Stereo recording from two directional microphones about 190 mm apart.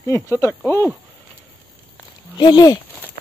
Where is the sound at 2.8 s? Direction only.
10° left (ahead or behind).